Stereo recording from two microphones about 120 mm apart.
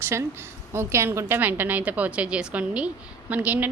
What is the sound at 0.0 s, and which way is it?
A woman's voice, 20° right (ahead or behind).